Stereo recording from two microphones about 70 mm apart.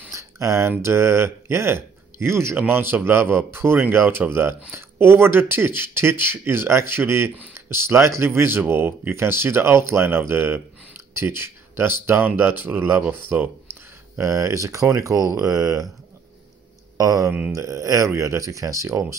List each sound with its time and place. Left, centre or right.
0.1 s speech: right
14.2 s speech: right
16.9 s speech: right